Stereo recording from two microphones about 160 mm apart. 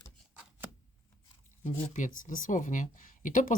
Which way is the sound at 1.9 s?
55° left (ahead or behind).